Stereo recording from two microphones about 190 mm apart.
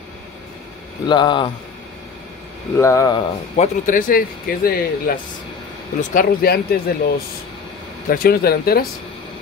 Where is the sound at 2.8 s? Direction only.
15° left (ahead or behind).